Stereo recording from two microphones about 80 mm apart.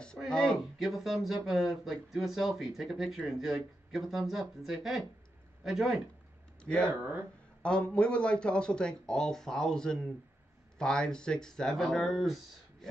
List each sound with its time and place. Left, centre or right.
0.3 s a sound: centre
0.7 s speech: centre
6.6 s speech: centre
6.9 s speech: right
7.6 s speech: centre